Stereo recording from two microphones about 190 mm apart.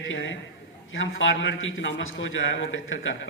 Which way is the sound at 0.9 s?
90° left.